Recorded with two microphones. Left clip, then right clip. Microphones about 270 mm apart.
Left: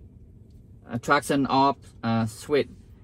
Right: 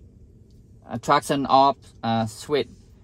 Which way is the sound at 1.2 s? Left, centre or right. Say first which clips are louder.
Right 4 dB; centre.